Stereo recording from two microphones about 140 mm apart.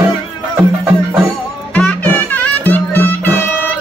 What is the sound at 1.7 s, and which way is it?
Music, 10° left (ahead or behind).